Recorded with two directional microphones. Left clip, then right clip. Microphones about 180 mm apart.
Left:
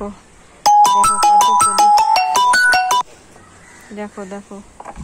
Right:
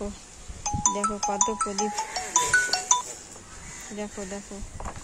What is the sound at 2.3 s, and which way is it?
Music, 85° left.